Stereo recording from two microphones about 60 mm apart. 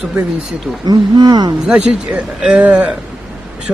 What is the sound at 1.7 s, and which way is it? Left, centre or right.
A man's voice, right.